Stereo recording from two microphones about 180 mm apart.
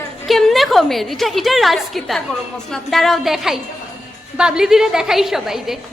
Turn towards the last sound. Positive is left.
turn(degrees=0)  # may be behind; listen again after turning